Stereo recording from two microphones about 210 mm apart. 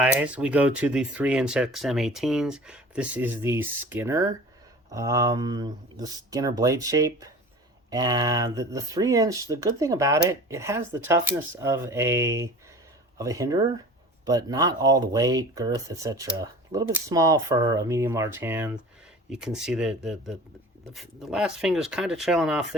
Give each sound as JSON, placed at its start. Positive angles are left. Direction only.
{"t": 0.0, "sound": "speech", "side_deg": -5}